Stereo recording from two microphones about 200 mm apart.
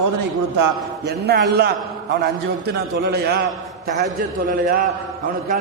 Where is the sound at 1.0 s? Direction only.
55° right (ahead or behind).